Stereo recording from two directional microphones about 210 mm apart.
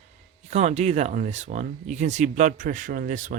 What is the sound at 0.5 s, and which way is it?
Speech, 30° right (ahead or behind).